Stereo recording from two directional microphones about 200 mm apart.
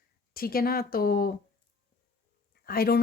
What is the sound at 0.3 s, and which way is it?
Speech, 45° left (ahead or behind).